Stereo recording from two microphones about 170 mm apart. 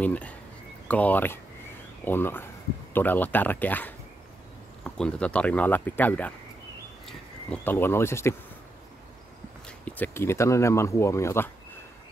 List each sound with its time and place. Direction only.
0.0 s speech: 10° left (ahead or behind)
9.7 s speech: 10° left (ahead or behind)